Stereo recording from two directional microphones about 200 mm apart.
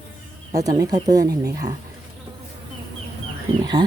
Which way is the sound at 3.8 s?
20° right (ahead or behind).